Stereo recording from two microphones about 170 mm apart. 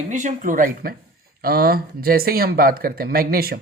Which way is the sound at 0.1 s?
45° right (ahead or behind).